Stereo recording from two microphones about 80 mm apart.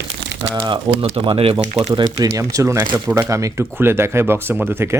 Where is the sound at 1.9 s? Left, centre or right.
Right.